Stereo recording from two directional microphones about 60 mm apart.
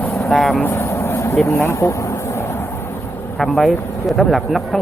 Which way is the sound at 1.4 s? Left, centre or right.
Left.